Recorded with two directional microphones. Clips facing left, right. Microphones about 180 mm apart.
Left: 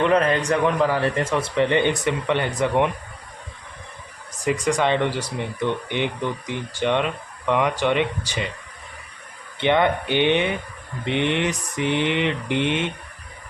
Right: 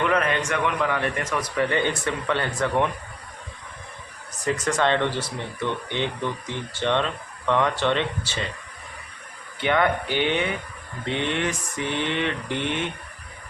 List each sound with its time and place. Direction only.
0.0 s a man's voice: 30° left (ahead or behind)
4.4 s speech: 15° left (ahead or behind)
9.6 s a man's voice: 20° left (ahead or behind)